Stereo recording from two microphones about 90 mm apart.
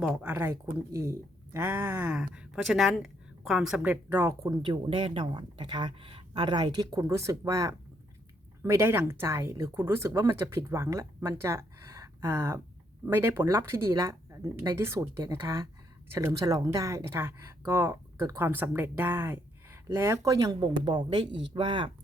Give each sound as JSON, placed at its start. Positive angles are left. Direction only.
{"t": 0.0, "sound": "speech", "side_deg": -10}
{"t": 0.3, "sound": "speech", "side_deg": -25}
{"t": 2.1, "sound": "a woman's voice", "side_deg": -10}
{"t": 4.1, "sound": "speech", "side_deg": -30}
{"t": 4.6, "sound": "speech", "side_deg": -60}
{"t": 7.0, "sound": "speech", "side_deg": -35}
{"t": 20.6, "sound": "speech", "side_deg": -60}